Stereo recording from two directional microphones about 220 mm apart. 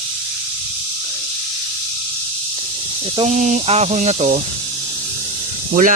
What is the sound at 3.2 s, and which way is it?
Speech, 30° right (ahead or behind).